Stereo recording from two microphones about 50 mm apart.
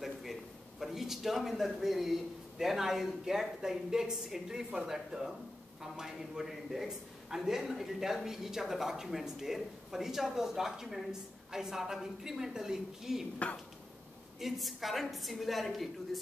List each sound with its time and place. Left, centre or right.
0.0 s a sound: centre
2.6 s a man's voice: centre
13.4 s speech: left
14.4 s a woman's voice: centre